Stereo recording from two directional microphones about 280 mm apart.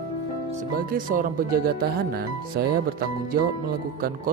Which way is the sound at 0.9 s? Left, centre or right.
Right.